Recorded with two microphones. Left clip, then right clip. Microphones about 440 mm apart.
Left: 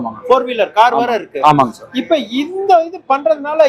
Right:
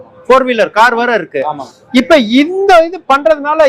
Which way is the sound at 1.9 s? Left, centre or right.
Right.